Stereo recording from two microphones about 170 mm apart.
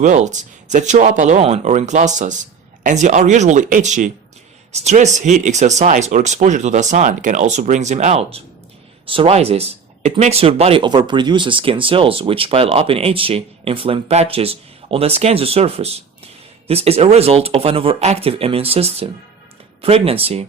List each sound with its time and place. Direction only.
0.0 s speech: 45° right (ahead or behind)